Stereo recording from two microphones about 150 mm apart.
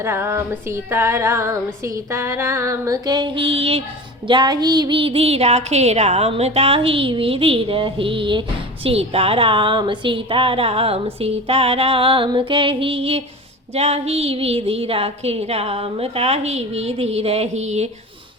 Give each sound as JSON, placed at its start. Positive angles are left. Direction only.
{"t": 0.0, "sound": "speech", "side_deg": -15}
{"t": 0.9, "sound": "female singing", "side_deg": -15}
{"t": 4.3, "sound": "a woman's voice", "side_deg": -30}